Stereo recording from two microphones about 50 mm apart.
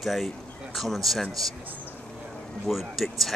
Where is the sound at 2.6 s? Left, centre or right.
Centre.